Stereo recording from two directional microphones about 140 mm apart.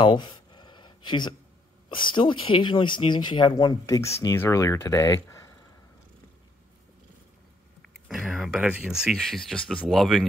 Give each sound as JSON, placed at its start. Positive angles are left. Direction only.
{"t": 0.0, "sound": "a sound", "side_deg": 35}
{"t": 1.9, "sound": "speech", "side_deg": 35}
{"t": 3.8, "sound": "speech", "side_deg": 20}
{"t": 7.8, "sound": "speech", "side_deg": 0}